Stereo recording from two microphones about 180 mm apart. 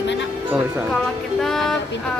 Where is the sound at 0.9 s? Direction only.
Centre (ahead or behind).